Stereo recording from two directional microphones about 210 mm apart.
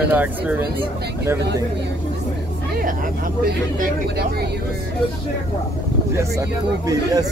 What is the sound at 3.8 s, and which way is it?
Speech, 45° right (ahead or behind).